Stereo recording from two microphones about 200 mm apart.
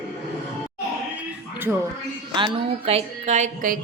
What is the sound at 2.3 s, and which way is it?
Speech, 25° right (ahead or behind).